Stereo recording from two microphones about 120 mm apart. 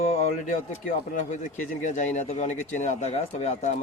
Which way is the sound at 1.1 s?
85° left.